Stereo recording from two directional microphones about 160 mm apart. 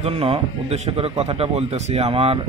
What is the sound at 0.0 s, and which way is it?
Speech, 40° right (ahead or behind).